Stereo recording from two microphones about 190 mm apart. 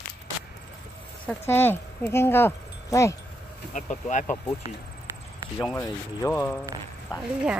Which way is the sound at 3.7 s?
40° left (ahead or behind).